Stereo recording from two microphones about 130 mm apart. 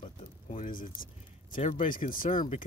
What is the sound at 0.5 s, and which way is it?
Speech, 80° left.